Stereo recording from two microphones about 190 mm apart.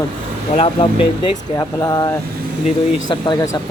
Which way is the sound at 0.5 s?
30° left (ahead or behind).